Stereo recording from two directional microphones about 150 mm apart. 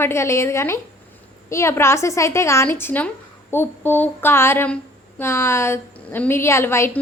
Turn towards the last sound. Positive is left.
turn(degrees=15)  # may be behind; listen again after turning